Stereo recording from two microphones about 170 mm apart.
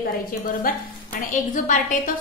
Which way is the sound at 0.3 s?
55° left (ahead or behind).